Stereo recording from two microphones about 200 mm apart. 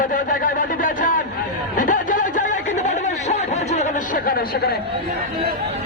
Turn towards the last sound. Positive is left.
turn(degrees=50)  # may be behind; listen again after turning